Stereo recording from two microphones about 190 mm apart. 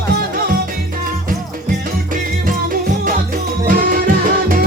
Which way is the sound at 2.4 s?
50° right (ahead or behind).